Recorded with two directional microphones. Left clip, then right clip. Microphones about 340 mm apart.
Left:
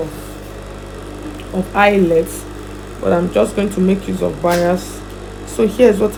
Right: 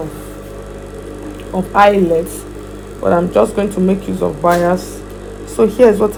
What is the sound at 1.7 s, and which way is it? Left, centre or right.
Speech, centre.